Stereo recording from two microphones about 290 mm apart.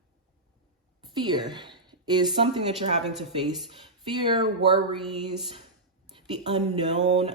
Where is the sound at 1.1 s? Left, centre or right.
Centre.